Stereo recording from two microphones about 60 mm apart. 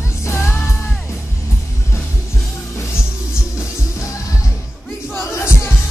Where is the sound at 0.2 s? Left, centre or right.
Left.